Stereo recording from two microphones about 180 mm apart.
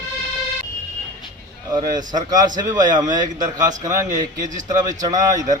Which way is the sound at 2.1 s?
20° right (ahead or behind).